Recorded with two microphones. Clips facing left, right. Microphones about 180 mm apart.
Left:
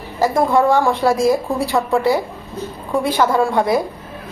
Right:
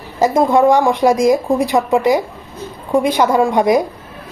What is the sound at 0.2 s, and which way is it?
A woman's voice, 20° right (ahead or behind).